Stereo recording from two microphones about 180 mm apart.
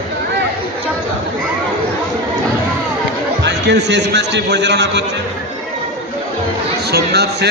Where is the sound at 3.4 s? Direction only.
70° right (ahead or behind).